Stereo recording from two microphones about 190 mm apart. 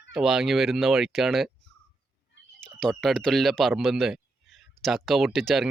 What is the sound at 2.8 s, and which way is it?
A man's voice, centre (ahead or behind).